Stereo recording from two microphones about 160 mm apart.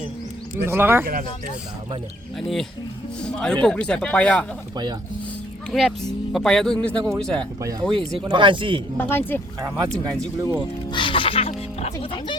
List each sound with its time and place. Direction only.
0.6 s speech: 15° right (ahead or behind)
2.4 s speech: 5° left (ahead or behind)
5.7 s speech: centre (ahead or behind)
7.6 s speech: 25° right (ahead or behind)
9.0 s speech: 15° left (ahead or behind)
10.2 s speech: 20° right (ahead or behind)
10.9 s speech: 30° left (ahead or behind)